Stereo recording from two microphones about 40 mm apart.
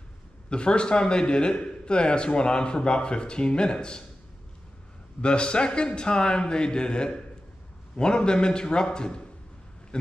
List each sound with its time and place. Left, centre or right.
0.5 s a man's voice: left
5.2 s a man's voice: left